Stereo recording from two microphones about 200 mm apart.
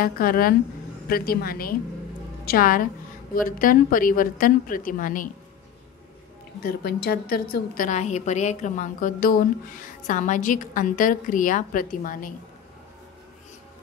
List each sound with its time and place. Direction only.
0.0 s a woman's voice: 45° left (ahead or behind)
6.6 s a woman's voice: 50° left (ahead or behind)